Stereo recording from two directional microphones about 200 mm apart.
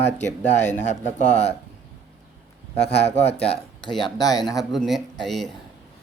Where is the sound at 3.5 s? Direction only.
25° left (ahead or behind).